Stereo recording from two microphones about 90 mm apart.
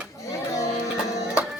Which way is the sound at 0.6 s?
35° left (ahead or behind).